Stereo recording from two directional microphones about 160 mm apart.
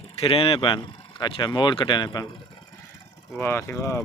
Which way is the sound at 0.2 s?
35° left (ahead or behind).